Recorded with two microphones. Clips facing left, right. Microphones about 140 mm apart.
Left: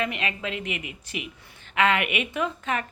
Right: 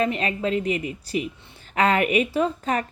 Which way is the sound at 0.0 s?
35° right (ahead or behind).